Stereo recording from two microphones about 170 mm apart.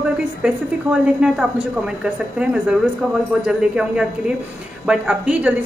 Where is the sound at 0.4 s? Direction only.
5° right (ahead or behind).